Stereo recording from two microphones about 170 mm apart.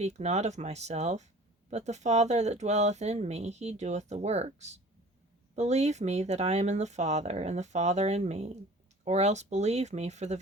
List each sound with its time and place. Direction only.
0.0 s speech: 40° right (ahead or behind)